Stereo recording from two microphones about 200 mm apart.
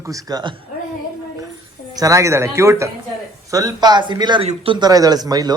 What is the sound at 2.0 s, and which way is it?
A man's voice, 15° right (ahead or behind).